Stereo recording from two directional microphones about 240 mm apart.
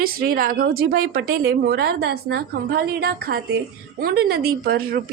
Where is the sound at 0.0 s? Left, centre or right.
Right.